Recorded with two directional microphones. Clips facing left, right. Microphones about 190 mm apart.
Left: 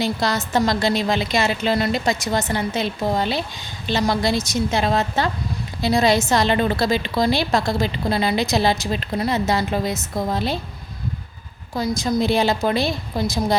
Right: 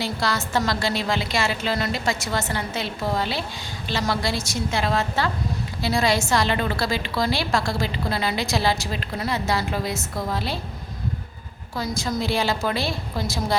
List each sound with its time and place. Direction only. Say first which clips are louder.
0.0 s a woman's voice: left 4 dB; 20° left (ahead or behind)
11.7 s a woman's voice: left 5 dB; 15° left (ahead or behind)